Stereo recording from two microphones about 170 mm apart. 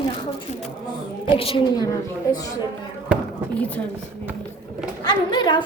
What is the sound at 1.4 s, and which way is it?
Speech, 30° left (ahead or behind).